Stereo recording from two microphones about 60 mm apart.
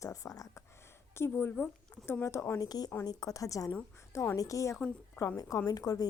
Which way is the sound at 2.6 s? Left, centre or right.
Left.